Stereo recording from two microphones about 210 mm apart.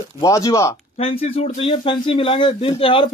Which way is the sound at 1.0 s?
25° left (ahead or behind).